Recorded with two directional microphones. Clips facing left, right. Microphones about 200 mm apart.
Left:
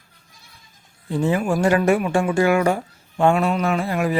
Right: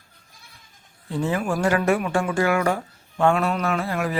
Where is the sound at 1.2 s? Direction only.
15° left (ahead or behind).